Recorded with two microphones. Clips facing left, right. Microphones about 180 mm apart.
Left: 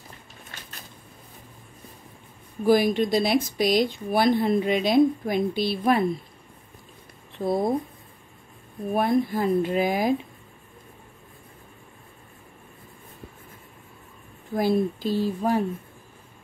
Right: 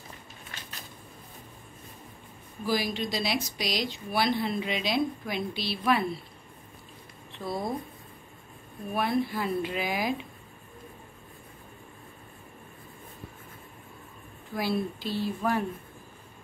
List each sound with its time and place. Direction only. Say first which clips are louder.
2.6 s speech: left 10 dB; 50° left (ahead or behind)
7.3 s speech: left 9 dB; 55° left (ahead or behind)
8.9 s speech: left 5 dB; 45° left (ahead or behind)
14.5 s speech: left 7 dB; 45° left (ahead or behind)